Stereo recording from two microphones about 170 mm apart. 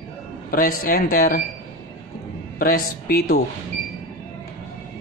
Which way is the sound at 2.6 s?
60° left (ahead or behind).